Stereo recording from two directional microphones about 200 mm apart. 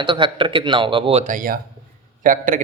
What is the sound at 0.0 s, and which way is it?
A man's voice, 25° right (ahead or behind).